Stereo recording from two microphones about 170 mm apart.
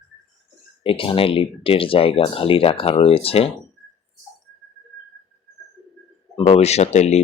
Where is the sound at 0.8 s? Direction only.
30° left (ahead or behind).